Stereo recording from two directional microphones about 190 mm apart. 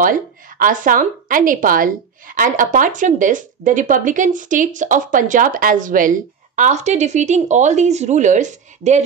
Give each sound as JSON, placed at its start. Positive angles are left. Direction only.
{"t": 0.0, "sound": "a woman's voice", "side_deg": -45}